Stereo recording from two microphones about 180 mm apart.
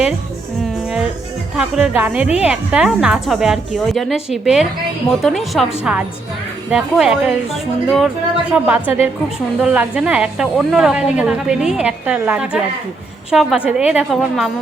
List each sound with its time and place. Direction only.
1.5 s a woman's voice: 5° right (ahead or behind)